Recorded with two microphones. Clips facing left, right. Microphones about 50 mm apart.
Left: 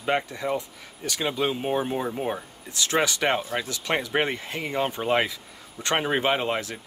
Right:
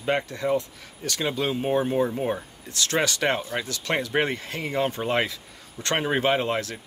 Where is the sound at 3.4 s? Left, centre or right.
Centre.